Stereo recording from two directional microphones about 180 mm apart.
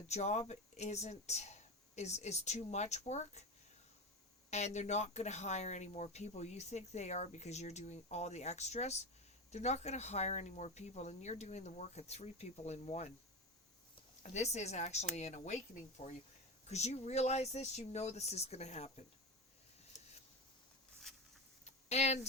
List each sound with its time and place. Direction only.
0.1 s speech: 40° left (ahead or behind)
4.5 s speech: 40° left (ahead or behind)
14.2 s speech: 40° left (ahead or behind)
21.6 s a sound: 40° left (ahead or behind)